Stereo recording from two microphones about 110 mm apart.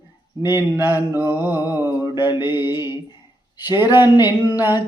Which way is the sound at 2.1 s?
20° right (ahead or behind).